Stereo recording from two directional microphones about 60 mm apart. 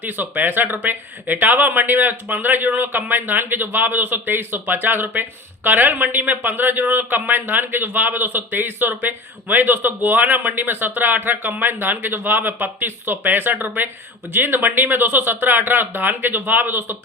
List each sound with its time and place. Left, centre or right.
0.0 s speech: right